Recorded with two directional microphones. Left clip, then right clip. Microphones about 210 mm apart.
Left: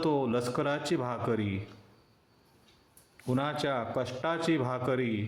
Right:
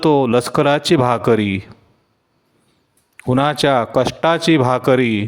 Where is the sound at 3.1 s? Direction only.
55° right (ahead or behind).